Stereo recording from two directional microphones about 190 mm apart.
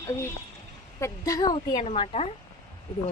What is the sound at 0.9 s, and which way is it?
A woman's voice, 15° left (ahead or behind).